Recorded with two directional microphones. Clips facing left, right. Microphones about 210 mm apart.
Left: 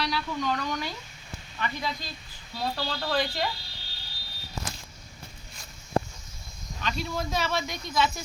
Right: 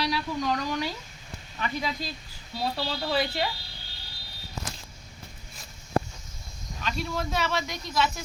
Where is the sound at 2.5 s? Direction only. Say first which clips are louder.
Right 1 dB; 5° right (ahead or behind).